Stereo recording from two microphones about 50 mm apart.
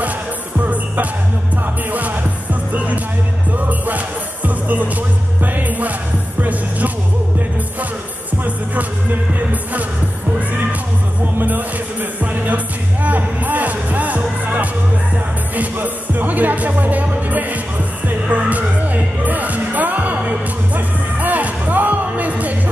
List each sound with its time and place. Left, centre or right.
1.9 s music: right
11.3 s music: right